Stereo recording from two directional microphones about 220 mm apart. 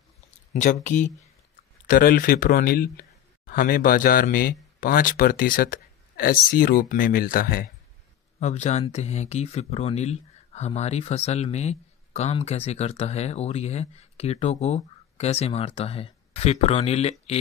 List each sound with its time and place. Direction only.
0.5 s speech: 35° left (ahead or behind)
8.4 s speech: 30° left (ahead or behind)